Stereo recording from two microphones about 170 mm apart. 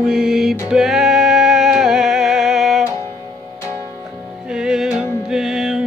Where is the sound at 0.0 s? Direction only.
5° right (ahead or behind).